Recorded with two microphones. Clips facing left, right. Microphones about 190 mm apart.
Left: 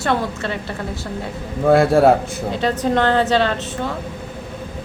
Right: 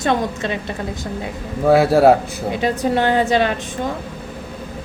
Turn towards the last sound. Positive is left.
turn(degrees=-15)  # may be behind; listen again after turning